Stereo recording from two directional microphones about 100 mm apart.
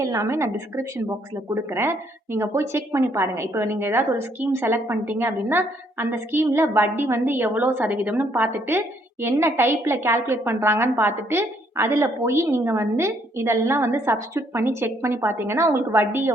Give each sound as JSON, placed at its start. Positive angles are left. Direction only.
{"t": 0.0, "sound": "a woman's voice", "side_deg": -30}